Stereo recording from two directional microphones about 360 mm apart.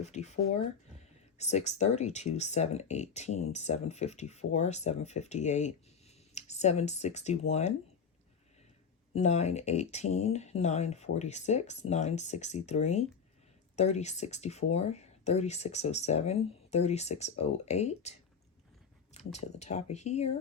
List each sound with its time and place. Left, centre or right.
0.0 s speech: centre
1.4 s speech: centre
9.1 s speech: centre
19.1 s speech: centre